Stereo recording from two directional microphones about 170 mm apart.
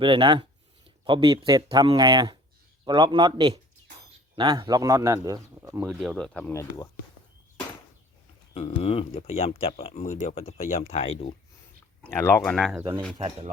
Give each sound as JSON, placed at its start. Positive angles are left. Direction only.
{"t": 0.0, "sound": "a man's voice", "side_deg": -30}
{"t": 5.9, "sound": "speech", "side_deg": 0}
{"t": 6.5, "sound": "speech", "side_deg": 20}
{"t": 8.5, "sound": "speech", "side_deg": 35}
{"t": 12.4, "sound": "speech", "side_deg": 5}
{"t": 13.1, "sound": "speech", "side_deg": -40}